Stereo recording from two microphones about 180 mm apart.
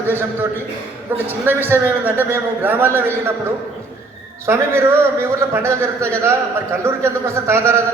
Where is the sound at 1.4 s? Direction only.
10° right (ahead or behind).